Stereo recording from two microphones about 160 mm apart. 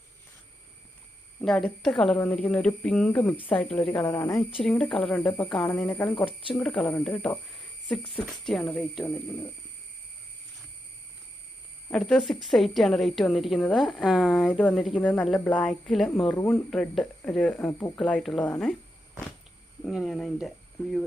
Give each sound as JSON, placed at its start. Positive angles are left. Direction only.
{"t": 1.4, "sound": "speech", "side_deg": 5}
{"t": 4.0, "sound": "speech", "side_deg": 20}
{"t": 4.6, "sound": "speech", "side_deg": 5}
{"t": 11.9, "sound": "speech", "side_deg": 5}
{"t": 19.9, "sound": "speech", "side_deg": 0}